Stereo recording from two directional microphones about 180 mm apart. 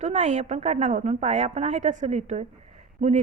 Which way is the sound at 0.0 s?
40° right (ahead or behind).